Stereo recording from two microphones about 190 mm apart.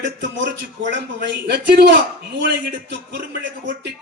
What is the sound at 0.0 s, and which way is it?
Speech, 70° right (ahead or behind).